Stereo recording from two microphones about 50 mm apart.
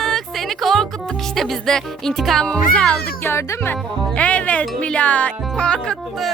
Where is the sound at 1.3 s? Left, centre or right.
Centre.